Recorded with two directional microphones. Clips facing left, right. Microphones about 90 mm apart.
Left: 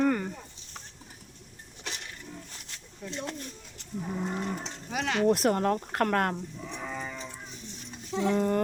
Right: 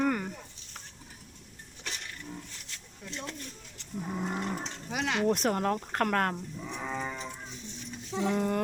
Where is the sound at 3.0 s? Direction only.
5° right (ahead or behind).